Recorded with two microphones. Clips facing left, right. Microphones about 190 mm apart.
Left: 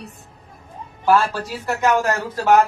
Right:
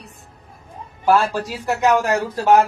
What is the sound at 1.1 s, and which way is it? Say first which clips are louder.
Speech: right 1 dB; 15° right (ahead or behind).